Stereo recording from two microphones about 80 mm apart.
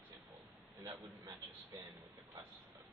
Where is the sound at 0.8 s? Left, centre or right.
Right.